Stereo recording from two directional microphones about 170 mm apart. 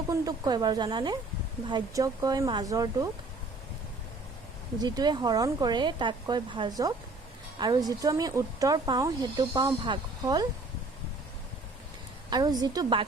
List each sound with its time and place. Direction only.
0.1 s speech: 25° right (ahead or behind)
4.8 s speech: 25° right (ahead or behind)
12.3 s speech: 25° right (ahead or behind)